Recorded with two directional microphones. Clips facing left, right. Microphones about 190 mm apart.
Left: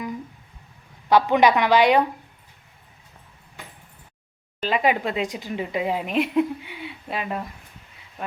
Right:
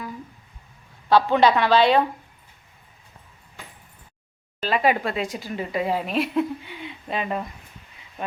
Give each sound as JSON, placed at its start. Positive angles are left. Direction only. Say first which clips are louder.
{"t": 1.1, "sound": "a woman's voice", "louder": "even", "side_deg": 15}
{"t": 4.6, "sound": "speech", "louder": "even", "side_deg": 15}